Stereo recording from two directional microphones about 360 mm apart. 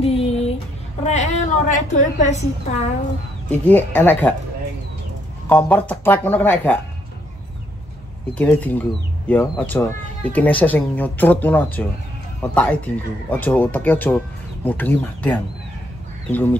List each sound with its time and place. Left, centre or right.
0.0 s a sound: centre
3.6 s speech: centre
5.5 s speech: centre
8.4 s speech: centre